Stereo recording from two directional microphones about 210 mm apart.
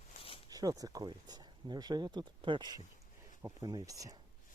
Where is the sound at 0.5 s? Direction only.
15° right (ahead or behind).